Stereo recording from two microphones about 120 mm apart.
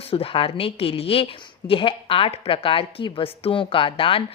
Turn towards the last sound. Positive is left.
turn(degrees=50)  # may be behind; listen again after turning